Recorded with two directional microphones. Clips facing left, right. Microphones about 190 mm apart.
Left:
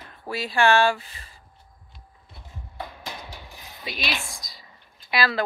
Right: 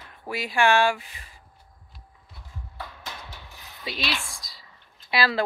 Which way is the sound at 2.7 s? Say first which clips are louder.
Left 3 dB; 15° left (ahead or behind).